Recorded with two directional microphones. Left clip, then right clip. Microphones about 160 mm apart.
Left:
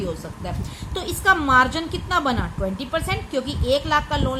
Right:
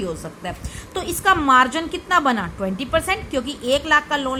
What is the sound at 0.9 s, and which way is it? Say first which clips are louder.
A woman's voice: right 1 dB; 25° right (ahead or behind).